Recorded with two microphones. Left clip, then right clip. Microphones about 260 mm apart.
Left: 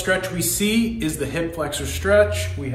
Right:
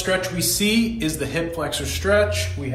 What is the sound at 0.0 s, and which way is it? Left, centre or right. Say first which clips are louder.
Speech: even; centre.